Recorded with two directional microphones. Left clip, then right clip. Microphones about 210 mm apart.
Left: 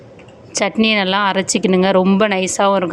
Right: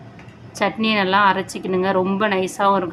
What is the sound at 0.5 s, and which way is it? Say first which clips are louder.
A woman's voice: left 4 dB; 35° left (ahead or behind).